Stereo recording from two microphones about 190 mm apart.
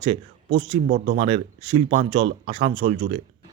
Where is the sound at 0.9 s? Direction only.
40° right (ahead or behind).